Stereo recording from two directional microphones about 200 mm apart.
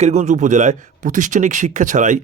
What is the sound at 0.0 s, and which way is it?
Speech, 35° right (ahead or behind).